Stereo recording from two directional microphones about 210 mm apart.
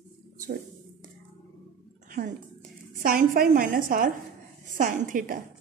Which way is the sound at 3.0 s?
40° right (ahead or behind).